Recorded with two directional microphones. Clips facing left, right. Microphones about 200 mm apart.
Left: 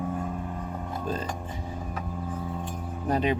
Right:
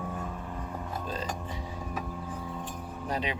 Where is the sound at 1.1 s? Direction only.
50° left (ahead or behind).